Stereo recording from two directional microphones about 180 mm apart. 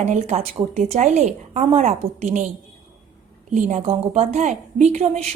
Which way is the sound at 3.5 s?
40° right (ahead or behind).